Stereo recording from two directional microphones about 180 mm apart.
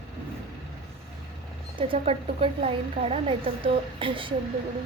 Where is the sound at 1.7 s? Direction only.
30° right (ahead or behind).